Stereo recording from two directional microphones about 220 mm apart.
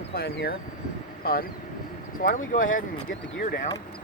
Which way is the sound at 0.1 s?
45° left (ahead or behind).